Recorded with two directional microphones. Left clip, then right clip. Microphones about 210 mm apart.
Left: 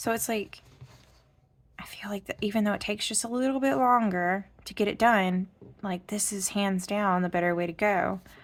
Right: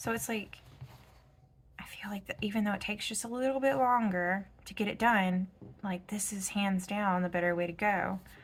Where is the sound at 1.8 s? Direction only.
60° left (ahead or behind).